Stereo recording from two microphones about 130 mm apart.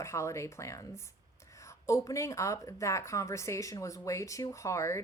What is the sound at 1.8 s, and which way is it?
Speech, 20° left (ahead or behind).